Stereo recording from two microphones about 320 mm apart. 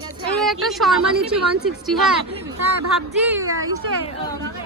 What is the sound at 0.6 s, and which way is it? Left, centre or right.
Speech, centre.